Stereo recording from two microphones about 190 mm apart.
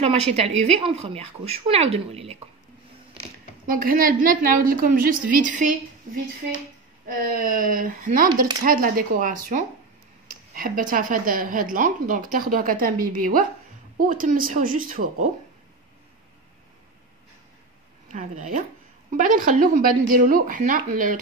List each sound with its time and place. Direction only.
0.0 s speech: 35° right (ahead or behind)
3.6 s speech: 50° right (ahead or behind)
7.2 s speech: 45° right (ahead or behind)
18.0 s speech: 40° right (ahead or behind)